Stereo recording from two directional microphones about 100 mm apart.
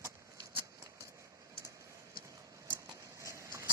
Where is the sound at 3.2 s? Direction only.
30° right (ahead or behind).